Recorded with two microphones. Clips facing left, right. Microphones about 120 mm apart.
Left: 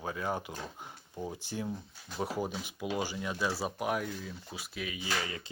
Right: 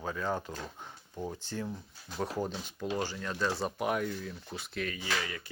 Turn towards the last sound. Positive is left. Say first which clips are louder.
# even
turn(degrees=25)  # may be behind; listen again after turning